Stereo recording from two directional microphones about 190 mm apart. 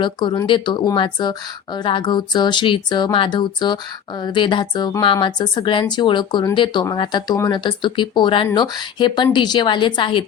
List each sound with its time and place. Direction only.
0.0 s speech: 25° left (ahead or behind)